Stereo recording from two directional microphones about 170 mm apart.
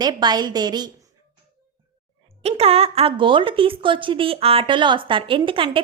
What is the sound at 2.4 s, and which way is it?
A woman's voice, 35° right (ahead or behind).